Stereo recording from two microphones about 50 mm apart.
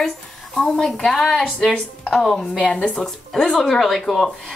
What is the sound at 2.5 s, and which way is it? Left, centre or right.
Speech, left.